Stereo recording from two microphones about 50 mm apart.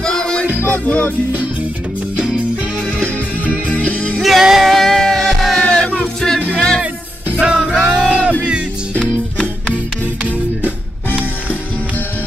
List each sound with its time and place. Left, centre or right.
0.0 s music: centre
0.6 s music: left
3.4 s music: left
4.2 s music: centre
4.7 s music: centre
5.6 s music: centre
7.3 s music: centre